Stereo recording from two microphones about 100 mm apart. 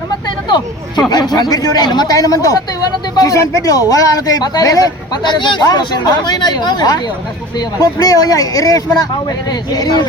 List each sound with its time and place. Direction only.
1.1 s speech: 45° left (ahead or behind)